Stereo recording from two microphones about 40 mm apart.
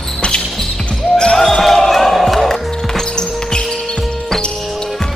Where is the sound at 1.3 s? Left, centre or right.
Centre.